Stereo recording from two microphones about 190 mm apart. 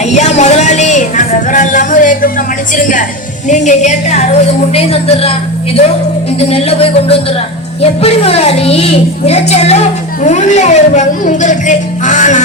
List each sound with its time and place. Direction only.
0.0 s music: 35° left (ahead or behind)
2.7 s a woman's voice: 45° left (ahead or behind)
6.4 s speech: 30° left (ahead or behind)